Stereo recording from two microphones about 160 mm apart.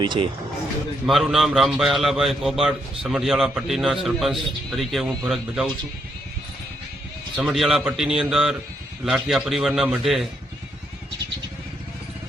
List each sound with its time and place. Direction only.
0.0 s speech: 30° right (ahead or behind)
1.0 s a man's voice: centre (ahead or behind)
7.3 s a man's voice: centre (ahead or behind)